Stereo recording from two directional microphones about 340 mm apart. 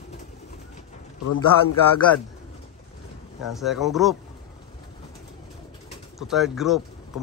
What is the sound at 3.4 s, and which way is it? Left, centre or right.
Speech, centre.